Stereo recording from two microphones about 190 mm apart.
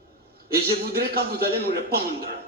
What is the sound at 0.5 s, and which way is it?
A man's voice, 55° right (ahead or behind).